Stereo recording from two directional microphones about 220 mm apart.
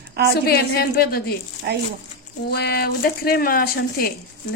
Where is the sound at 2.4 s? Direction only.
45° left (ahead or behind).